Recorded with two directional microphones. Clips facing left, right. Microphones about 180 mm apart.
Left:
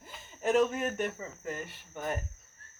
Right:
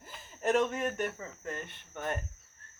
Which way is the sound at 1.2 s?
5° left (ahead or behind).